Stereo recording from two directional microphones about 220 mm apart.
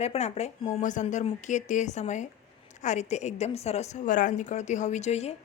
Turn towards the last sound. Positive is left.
turn(degrees=30)  # may be behind; listen again after turning